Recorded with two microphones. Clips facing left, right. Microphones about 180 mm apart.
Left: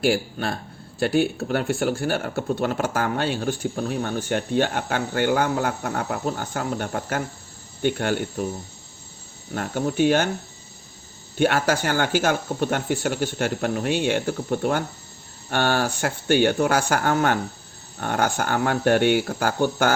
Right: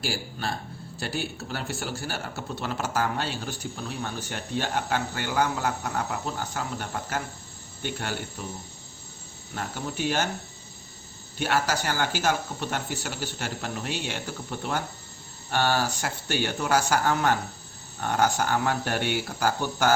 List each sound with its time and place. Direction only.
0.0 s speech: 60° left (ahead or behind)
9.6 s speech: 55° left (ahead or behind)
11.3 s speech: 55° left (ahead or behind)